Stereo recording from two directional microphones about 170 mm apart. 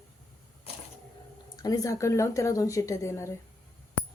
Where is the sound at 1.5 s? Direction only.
20° left (ahead or behind).